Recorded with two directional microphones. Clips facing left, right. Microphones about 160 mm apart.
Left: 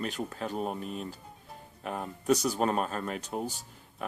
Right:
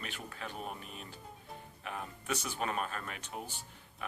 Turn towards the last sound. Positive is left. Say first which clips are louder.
# left 3 dB
turn(degrees=40)  # may be behind; listen again after turning